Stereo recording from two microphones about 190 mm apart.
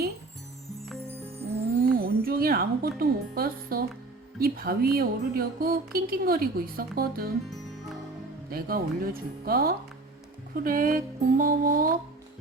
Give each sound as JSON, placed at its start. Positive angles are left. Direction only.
{"t": 2.0, "sound": "a sound", "side_deg": -50}
{"t": 3.0, "sound": "speech", "side_deg": -50}
{"t": 8.4, "sound": "speech", "side_deg": -50}